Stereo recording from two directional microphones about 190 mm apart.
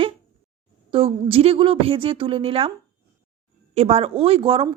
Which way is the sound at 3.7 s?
30° right (ahead or behind).